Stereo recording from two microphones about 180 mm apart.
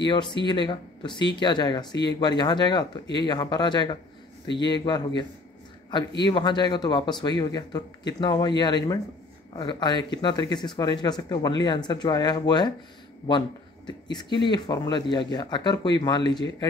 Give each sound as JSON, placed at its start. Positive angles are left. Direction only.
{"t": 0.0, "sound": "speech", "side_deg": 25}
{"t": 14.1, "sound": "speech", "side_deg": 25}